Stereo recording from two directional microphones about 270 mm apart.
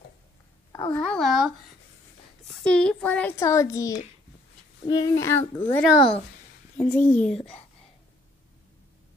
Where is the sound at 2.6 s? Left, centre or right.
Centre.